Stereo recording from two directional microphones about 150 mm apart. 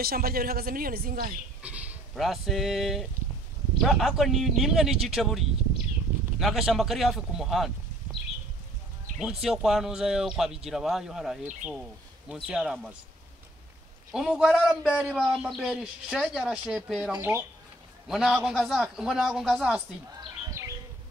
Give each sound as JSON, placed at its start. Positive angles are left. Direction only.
{"t": 0.0, "sound": "speech", "side_deg": -85}
{"t": 1.6, "sound": "a sound", "side_deg": -10}
{"t": 2.1, "sound": "a man's voice", "side_deg": 0}
{"t": 6.4, "sound": "a man's voice", "side_deg": 0}
{"t": 9.2, "sound": "a man's voice", "side_deg": -5}
{"t": 14.1, "sound": "a man's voice", "side_deg": -5}
{"t": 17.2, "sound": "speech", "side_deg": -15}
{"t": 18.0, "sound": "a man's voice", "side_deg": -5}
{"t": 20.2, "sound": "bird", "side_deg": -20}